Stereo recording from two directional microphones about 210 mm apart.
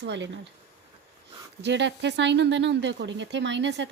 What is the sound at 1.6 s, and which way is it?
Speech, 55° right (ahead or behind).